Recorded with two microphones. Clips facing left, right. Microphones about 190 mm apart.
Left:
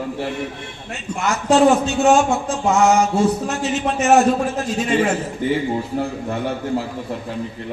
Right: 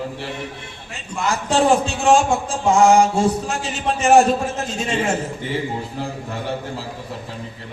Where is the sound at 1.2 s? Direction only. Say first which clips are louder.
Left 3 dB; 30° right (ahead or behind).